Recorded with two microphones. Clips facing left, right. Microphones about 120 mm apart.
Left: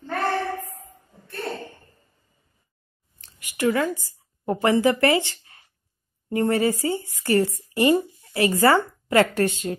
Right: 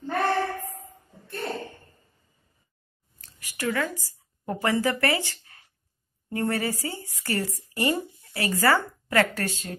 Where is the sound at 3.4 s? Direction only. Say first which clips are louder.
Left 6 dB; 20° left (ahead or behind).